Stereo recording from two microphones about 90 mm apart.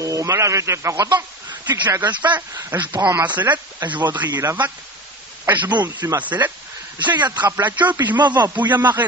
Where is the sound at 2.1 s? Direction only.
55° right (ahead or behind).